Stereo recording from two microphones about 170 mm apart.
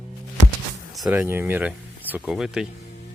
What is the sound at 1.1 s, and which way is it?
Speech, 15° right (ahead or behind).